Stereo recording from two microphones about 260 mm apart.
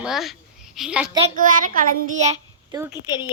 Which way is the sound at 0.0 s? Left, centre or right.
Centre.